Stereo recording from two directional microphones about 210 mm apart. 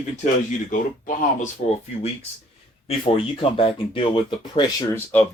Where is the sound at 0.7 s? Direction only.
40° left (ahead or behind).